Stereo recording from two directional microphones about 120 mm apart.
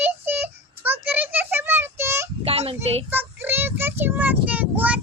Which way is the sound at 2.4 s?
55° right (ahead or behind).